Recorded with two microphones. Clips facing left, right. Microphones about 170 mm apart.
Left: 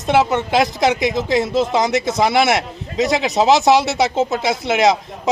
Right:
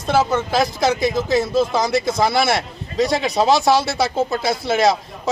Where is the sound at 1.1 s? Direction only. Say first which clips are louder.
Even; 20° left (ahead or behind).